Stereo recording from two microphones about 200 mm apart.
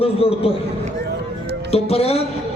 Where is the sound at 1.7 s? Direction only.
30° left (ahead or behind).